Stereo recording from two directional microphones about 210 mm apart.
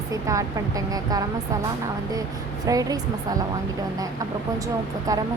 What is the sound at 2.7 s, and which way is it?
Speech, 15° right (ahead or behind).